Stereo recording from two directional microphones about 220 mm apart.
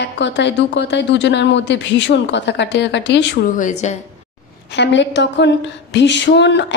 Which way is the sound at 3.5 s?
35° left (ahead or behind).